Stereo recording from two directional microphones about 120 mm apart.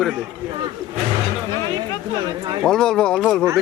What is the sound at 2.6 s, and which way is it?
Speech, 5° left (ahead or behind).